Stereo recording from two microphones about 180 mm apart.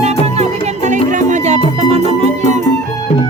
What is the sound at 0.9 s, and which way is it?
Music, 40° right (ahead or behind).